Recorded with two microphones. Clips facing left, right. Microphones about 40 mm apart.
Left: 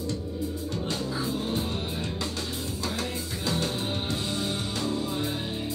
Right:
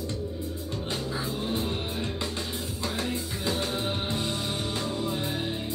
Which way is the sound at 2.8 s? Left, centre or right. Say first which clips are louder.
Right 2 dB; right.